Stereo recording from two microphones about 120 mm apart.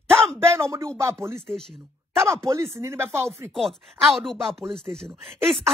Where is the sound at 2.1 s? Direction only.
20° right (ahead or behind).